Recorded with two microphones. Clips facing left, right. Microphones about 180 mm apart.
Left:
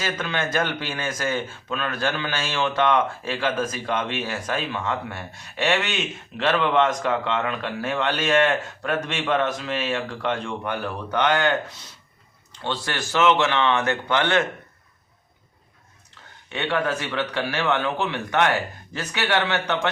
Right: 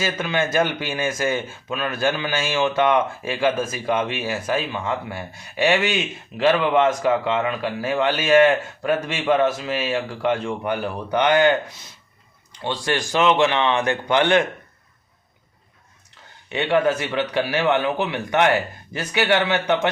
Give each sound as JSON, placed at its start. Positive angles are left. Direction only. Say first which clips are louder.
{"t": 0.0, "sound": "speech", "louder": "right 4 dB", "side_deg": -10}
{"t": 12.6, "sound": "speech", "louder": "right 4 dB", "side_deg": -15}
{"t": 16.5, "sound": "speech", "louder": "right 5 dB", "side_deg": -15}